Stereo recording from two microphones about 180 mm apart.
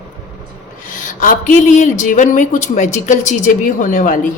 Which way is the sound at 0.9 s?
50° left (ahead or behind).